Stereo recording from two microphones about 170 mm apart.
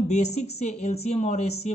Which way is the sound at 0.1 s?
40° left (ahead or behind).